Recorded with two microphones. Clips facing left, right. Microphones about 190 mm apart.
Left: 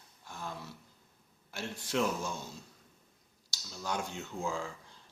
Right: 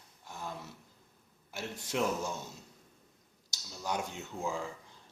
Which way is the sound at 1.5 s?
15° right (ahead or behind).